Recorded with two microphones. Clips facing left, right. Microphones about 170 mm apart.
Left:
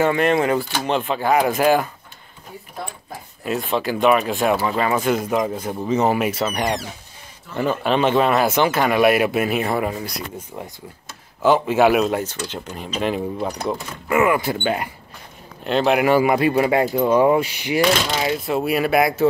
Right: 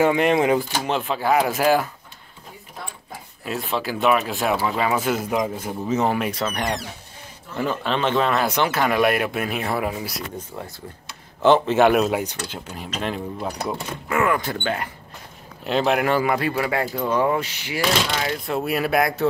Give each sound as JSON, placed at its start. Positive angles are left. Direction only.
{"t": 0.0, "sound": "speech", "side_deg": -15}
{"t": 0.8, "sound": "speech", "side_deg": 0}
{"t": 3.4, "sound": "speech", "side_deg": 0}
{"t": 11.4, "sound": "speech", "side_deg": 10}
{"t": 12.2, "sound": "speech", "side_deg": -10}
{"t": 15.6, "sound": "speech", "side_deg": 0}
{"t": 18.4, "sound": "speech", "side_deg": 0}